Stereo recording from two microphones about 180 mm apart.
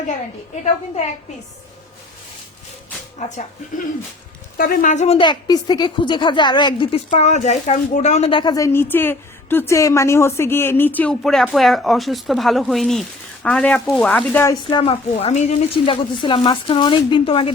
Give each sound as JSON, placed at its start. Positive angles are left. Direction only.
{"t": 0.6, "sound": "a woman's voice", "side_deg": 40}
{"t": 3.2, "sound": "speech", "side_deg": 40}
{"t": 4.5, "sound": "a woman's voice", "side_deg": 50}
{"t": 14.5, "sound": "speech", "side_deg": 25}
{"t": 15.1, "sound": "speech", "side_deg": 40}